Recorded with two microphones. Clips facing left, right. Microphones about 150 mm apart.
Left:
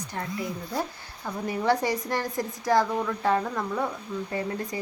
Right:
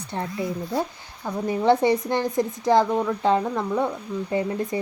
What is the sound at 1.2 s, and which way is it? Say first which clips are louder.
Speech: right 5 dB; 20° right (ahead or behind).